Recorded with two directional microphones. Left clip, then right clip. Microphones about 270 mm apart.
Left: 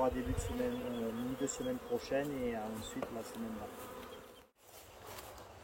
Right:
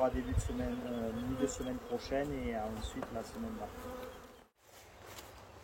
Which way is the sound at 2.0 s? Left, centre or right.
Centre.